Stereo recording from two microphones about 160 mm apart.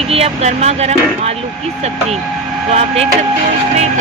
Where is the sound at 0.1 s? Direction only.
40° right (ahead or behind).